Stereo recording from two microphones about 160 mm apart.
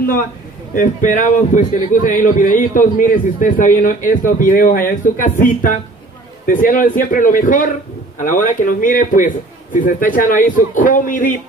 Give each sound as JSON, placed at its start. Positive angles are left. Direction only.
{"t": 0.7, "sound": "a man's voice", "side_deg": 50}